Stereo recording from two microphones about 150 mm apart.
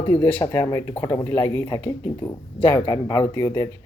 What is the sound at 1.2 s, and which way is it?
Speech, 40° left (ahead or behind).